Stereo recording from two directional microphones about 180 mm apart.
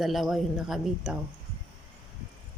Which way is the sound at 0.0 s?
Centre (ahead or behind).